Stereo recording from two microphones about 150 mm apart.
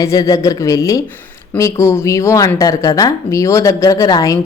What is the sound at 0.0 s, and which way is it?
Speech, 25° left (ahead or behind).